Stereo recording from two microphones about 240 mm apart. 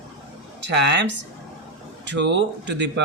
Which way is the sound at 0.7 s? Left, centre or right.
Right.